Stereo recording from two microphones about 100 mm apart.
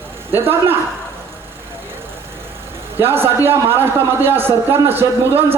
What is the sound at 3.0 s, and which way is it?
A man's voice, 20° right (ahead or behind).